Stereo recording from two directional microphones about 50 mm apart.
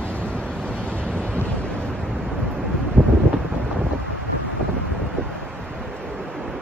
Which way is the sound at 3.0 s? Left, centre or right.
Right.